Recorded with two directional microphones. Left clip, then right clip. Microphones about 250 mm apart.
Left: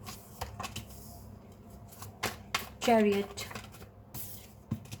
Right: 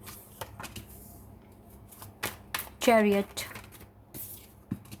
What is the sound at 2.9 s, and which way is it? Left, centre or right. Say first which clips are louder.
Speech: right 3 dB; right.